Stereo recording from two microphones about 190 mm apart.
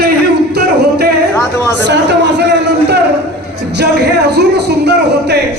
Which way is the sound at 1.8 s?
65° right (ahead or behind).